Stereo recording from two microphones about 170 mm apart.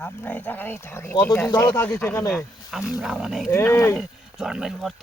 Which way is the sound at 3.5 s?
15° left (ahead or behind).